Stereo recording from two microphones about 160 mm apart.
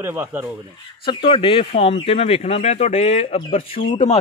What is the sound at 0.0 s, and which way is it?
Speech, 15° right (ahead or behind).